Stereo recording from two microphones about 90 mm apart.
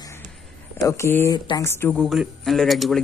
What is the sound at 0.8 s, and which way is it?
Speech, 30° left (ahead or behind).